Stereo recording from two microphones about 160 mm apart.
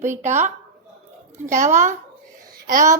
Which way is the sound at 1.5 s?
50° right (ahead or behind).